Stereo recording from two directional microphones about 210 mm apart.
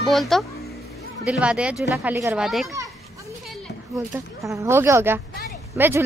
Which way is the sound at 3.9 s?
15° right (ahead or behind).